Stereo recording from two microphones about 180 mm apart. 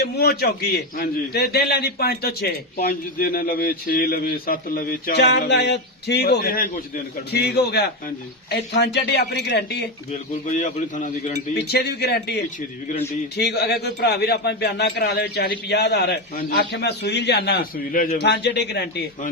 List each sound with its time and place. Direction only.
0.0 s speech: 60° left (ahead or behind)
10.1 s a man's voice: 40° left (ahead or behind)
11.5 s speech: 65° left (ahead or behind)
13.3 s speech: 65° left (ahead or behind)
16.4 s speech: 55° left (ahead or behind)
18.2 s speech: 65° left (ahead or behind)